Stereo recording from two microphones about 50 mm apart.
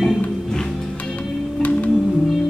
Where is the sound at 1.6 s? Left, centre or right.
Left.